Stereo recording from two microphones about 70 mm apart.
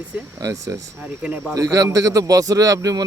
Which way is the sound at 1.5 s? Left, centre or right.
Right.